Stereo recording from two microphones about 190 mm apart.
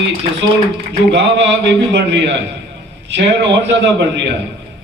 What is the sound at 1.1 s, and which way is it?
A man's voice, 65° right (ahead or behind).